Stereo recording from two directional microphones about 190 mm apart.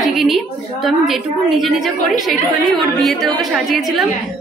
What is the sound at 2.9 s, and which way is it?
Speech, centre (ahead or behind).